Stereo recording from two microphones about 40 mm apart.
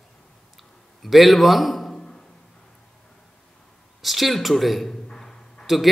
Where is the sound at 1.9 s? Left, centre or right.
Centre.